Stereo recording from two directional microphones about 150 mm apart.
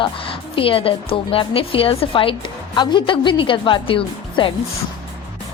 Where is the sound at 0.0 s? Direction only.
35° left (ahead or behind).